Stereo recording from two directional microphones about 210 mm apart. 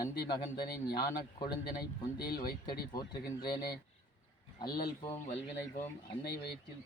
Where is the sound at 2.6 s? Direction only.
20° left (ahead or behind).